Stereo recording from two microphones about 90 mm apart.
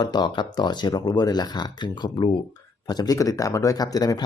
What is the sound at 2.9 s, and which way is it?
Speech, 45° left (ahead or behind).